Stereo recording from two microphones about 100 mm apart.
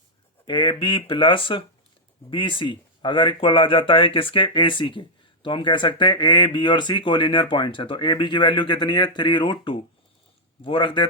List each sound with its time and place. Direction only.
0.4 s speech: 50° left (ahead or behind)